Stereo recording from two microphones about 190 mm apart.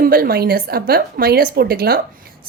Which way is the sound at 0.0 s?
50° right (ahead or behind).